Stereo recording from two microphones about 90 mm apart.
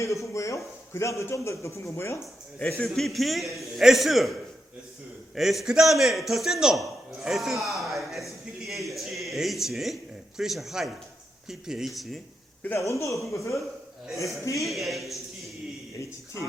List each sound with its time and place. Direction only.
0.0 s a man's voice: 35° left (ahead or behind)
2.6 s a man's voice: 15° left (ahead or behind)
8.9 s a sound: centre (ahead or behind)
11.4 s a man's voice: 5° right (ahead or behind)
12.7 s speech: 35° left (ahead or behind)
14.7 s a man's voice: centre (ahead or behind)